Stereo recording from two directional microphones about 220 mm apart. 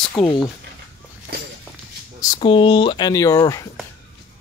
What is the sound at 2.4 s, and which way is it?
Speech, 25° left (ahead or behind).